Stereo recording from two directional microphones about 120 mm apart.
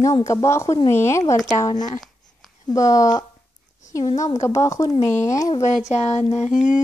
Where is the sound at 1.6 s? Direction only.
35° left (ahead or behind).